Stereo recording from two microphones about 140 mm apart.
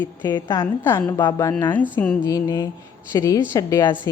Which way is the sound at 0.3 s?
30° left (ahead or behind).